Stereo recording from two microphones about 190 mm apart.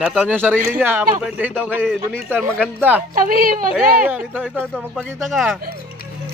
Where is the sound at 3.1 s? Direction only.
50° right (ahead or behind).